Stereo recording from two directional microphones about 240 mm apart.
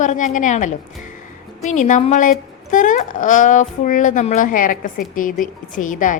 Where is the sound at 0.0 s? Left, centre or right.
Left.